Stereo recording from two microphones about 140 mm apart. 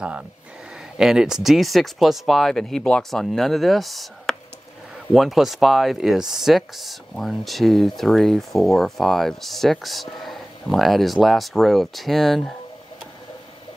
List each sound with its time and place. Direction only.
0.9 s speech: 5° right (ahead or behind)